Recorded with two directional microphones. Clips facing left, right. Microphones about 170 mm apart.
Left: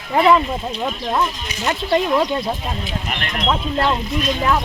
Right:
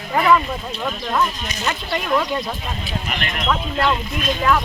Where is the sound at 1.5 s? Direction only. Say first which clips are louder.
Left 5 dB; 20° left (ahead or behind).